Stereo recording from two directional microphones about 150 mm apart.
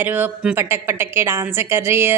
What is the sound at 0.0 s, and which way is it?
A woman's voice, 10° right (ahead or behind).